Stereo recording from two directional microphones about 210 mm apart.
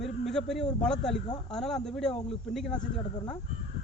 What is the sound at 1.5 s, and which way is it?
Speech, centre (ahead or behind).